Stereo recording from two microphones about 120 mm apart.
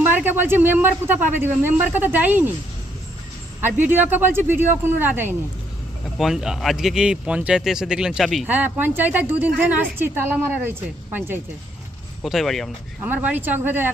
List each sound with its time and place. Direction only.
0.0 s a woman's voice: 15° right (ahead or behind)
3.6 s a woman's voice: 15° right (ahead or behind)
6.1 s speech: 5° right (ahead or behind)
8.4 s a woman's voice: 15° right (ahead or behind)
12.2 s speech: centre (ahead or behind)
13.0 s a woman's voice: 15° right (ahead or behind)